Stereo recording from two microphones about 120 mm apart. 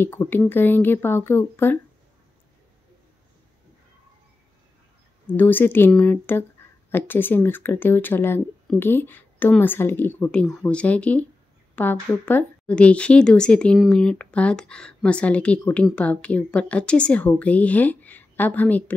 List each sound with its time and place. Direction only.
0.0 s speech: 15° left (ahead or behind)
5.2 s speech: 15° left (ahead or behind)